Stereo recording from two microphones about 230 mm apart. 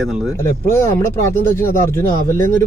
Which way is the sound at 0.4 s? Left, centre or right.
Centre.